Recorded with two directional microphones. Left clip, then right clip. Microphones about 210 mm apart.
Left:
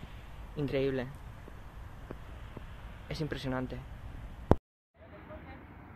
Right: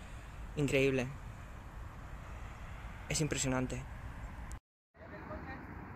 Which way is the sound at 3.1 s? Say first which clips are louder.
Right 1 dB; 25° right (ahead or behind).